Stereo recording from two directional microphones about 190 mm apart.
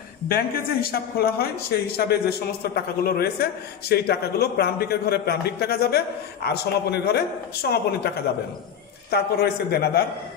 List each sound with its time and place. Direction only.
0.3 s a man's voice: 50° left (ahead or behind)
9.1 s a man's voice: 55° left (ahead or behind)